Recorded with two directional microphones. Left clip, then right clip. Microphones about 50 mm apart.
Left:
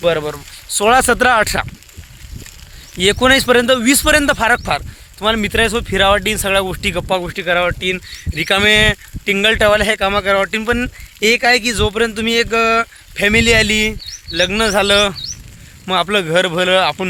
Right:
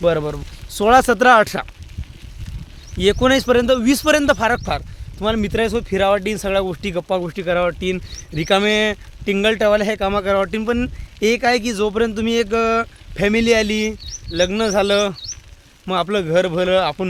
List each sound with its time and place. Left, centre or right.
0.2 s speech: left
1.0 s speech: centre
3.0 s speech: left
3.5 s a man's voice: centre
5.4 s speech: centre
7.3 s speech: right
7.8 s speech: right
8.4 s speech: centre
9.6 s speech: centre
11.9 s speech: centre
12.3 s speech: right
13.2 s speech: centre